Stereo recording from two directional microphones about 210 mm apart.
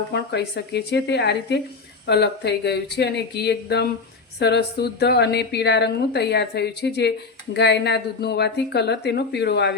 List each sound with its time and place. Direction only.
0.1 s a woman's voice: 55° left (ahead or behind)